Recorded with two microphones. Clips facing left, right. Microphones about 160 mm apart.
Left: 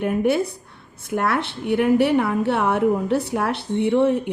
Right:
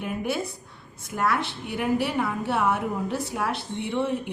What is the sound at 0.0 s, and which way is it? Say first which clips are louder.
A woman's voice: left 9 dB; 55° left (ahead or behind).